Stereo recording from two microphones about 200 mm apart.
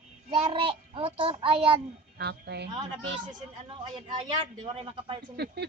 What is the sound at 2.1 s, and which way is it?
Speech, 55° right (ahead or behind).